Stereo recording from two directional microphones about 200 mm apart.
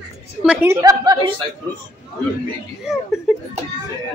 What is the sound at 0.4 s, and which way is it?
Speech, 10° right (ahead or behind).